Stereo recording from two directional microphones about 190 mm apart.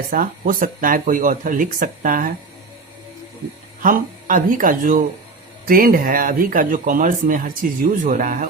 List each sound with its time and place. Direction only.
0.1 s speech: 45° right (ahead or behind)
3.8 s speech: 45° right (ahead or behind)